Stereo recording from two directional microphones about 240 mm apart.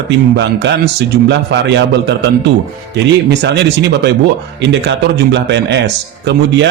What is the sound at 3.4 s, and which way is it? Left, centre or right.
A man's voice, right.